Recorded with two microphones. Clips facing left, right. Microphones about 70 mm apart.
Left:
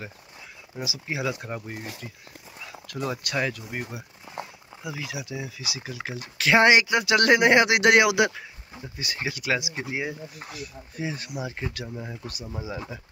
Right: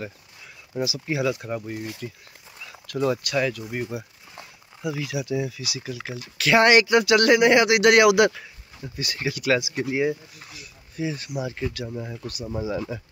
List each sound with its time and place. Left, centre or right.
0.7 s speech: centre
1.3 s speech: left
2.9 s speech: centre
3.3 s speech: left
4.9 s speech: centre
5.6 s speech: left
6.7 s speech: centre
7.2 s speech: left; by 10.0 s centre
10.4 s speech: left; by 13.0 s centre